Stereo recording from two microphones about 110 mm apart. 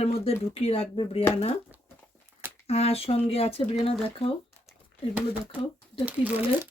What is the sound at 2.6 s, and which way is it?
Speech, 70° left (ahead or behind).